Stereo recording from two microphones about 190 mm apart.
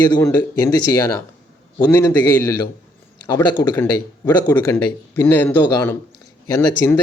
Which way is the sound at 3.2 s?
20° left (ahead or behind).